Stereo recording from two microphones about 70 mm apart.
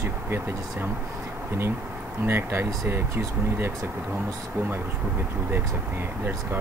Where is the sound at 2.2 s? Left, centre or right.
Right.